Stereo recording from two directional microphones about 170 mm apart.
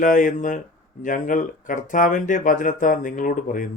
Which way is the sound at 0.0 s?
50° left (ahead or behind).